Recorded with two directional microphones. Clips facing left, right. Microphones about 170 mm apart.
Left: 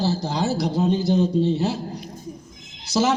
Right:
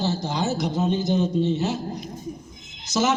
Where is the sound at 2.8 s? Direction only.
30° left (ahead or behind).